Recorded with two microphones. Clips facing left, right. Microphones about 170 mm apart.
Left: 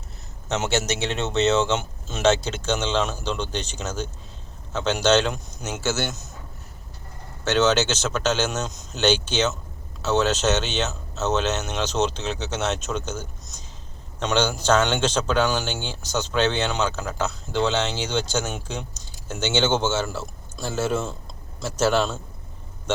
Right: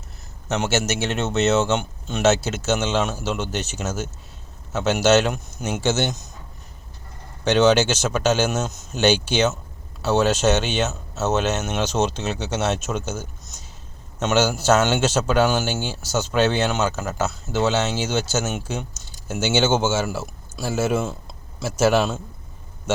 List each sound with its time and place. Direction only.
0.4 s a man's voice: centre (ahead or behind); by 6.1 s 20° right (ahead or behind)
7.4 s a man's voice: 15° right (ahead or behind)